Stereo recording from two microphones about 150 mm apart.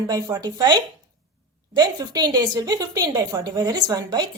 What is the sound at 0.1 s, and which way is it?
A woman's voice, 25° right (ahead or behind).